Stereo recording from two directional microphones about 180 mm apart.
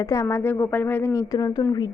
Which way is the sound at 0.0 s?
15° left (ahead or behind).